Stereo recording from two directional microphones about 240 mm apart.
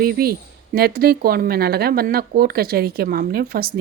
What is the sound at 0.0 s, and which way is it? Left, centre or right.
Speech, right.